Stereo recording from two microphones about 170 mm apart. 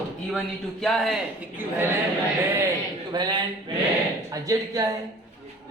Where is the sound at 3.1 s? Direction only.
25° right (ahead or behind).